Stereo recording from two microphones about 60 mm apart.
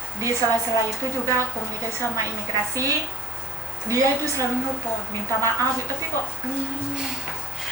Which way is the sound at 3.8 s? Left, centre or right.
Right.